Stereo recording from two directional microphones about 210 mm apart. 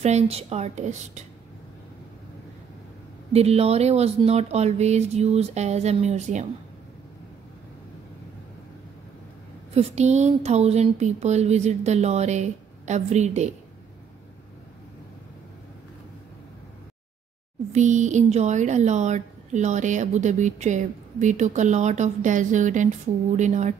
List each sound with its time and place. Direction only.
0.0 s speech: 30° right (ahead or behind)
3.3 s speech: 30° right (ahead or behind)
9.8 s speech: 30° right (ahead or behind)
17.7 s speech: 35° right (ahead or behind)